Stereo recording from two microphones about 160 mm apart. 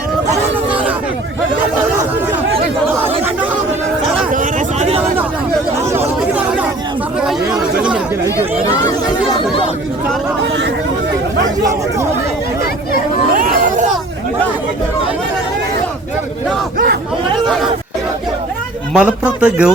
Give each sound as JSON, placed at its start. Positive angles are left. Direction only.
{"t": 0.7, "sound": "a sound", "side_deg": -10}
{"t": 4.3, "sound": "a sound", "side_deg": -50}
{"t": 6.3, "sound": "chatter", "side_deg": -10}
{"t": 13.3, "sound": "chatter", "side_deg": -60}
{"t": 16.7, "sound": "chatter", "side_deg": -80}
{"t": 18.9, "sound": "speech", "side_deg": -10}